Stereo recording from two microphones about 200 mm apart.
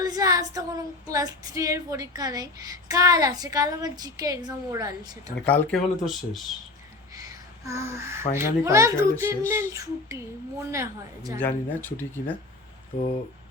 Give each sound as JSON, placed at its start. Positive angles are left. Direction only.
{"t": 0.0, "sound": "female singing", "side_deg": -15}
{"t": 5.5, "sound": "speech", "side_deg": 0}
{"t": 7.2, "sound": "a sound", "side_deg": -15}
{"t": 8.3, "sound": "female singing", "side_deg": -15}
{"t": 11.3, "sound": "speech", "side_deg": 10}